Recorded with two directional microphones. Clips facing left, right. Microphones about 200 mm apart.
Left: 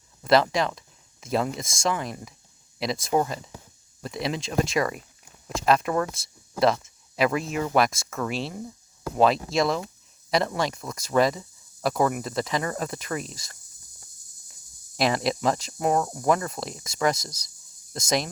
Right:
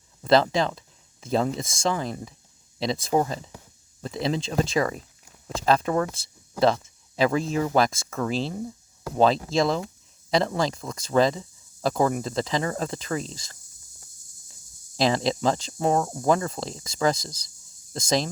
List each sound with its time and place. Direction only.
0.2 s speech: 30° right (ahead or behind)
14.9 s speech: 25° right (ahead or behind)